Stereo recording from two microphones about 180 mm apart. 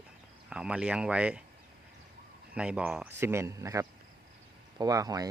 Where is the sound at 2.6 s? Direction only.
5° right (ahead or behind).